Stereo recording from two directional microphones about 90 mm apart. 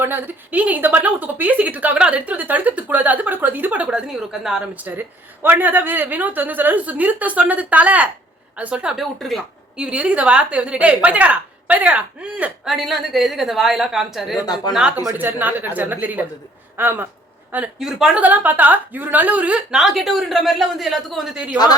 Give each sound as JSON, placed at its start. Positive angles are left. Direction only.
{"t": 0.0, "sound": "a woman's voice", "side_deg": -25}
{"t": 4.7, "sound": "a woman's voice", "side_deg": -20}
{"t": 9.1, "sound": "a woman's voice", "side_deg": 0}
{"t": 9.7, "sound": "a woman's voice", "side_deg": -10}
{"t": 12.6, "sound": "a woman's voice", "side_deg": -5}
{"t": 14.4, "sound": "speech", "side_deg": 50}
{"t": 15.2, "sound": "a woman's voice", "side_deg": -20}
{"t": 17.7, "sound": "a woman's voice", "side_deg": -5}
{"t": 18.2, "sound": "a woman's voice", "side_deg": -20}